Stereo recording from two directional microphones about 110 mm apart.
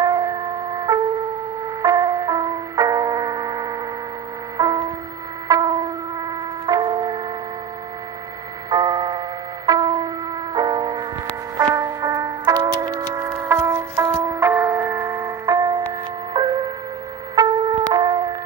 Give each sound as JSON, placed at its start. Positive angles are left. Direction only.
{"t": 0.0, "sound": "music", "side_deg": -30}
{"t": 5.5, "sound": "a sound", "side_deg": -30}
{"t": 8.6, "sound": "tick-tock", "side_deg": -35}
{"t": 9.7, "sound": "music", "side_deg": -35}
{"t": 13.4, "sound": "a sound", "side_deg": -25}
{"t": 14.2, "sound": "music", "side_deg": -25}